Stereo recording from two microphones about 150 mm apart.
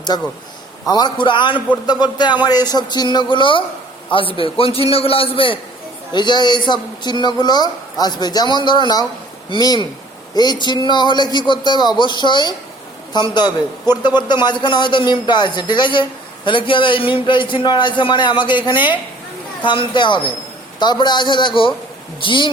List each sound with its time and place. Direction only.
0.1 s a man's voice: 25° left (ahead or behind)